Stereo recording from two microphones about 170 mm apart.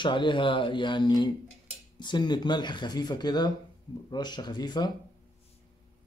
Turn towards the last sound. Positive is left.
turn(degrees=25)  # may be behind; listen again after turning